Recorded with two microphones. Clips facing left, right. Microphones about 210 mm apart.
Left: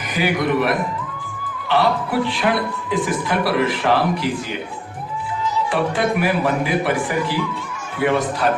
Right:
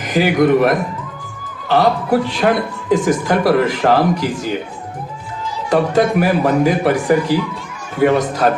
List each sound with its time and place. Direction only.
0.1 s a man's voice: 45° right (ahead or behind)
5.7 s a man's voice: 45° right (ahead or behind)